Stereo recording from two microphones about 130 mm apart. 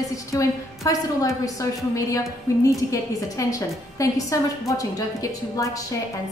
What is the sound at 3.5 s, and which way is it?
A woman's voice, 25° left (ahead or behind).